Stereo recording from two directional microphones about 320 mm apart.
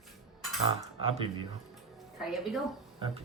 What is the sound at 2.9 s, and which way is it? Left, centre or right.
Music, centre.